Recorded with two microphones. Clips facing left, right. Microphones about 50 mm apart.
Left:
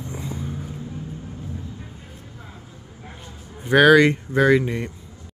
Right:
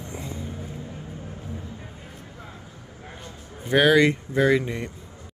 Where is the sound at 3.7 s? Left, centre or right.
Left.